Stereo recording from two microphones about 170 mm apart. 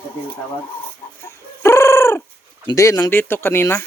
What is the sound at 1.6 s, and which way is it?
Fowl, 15° left (ahead or behind).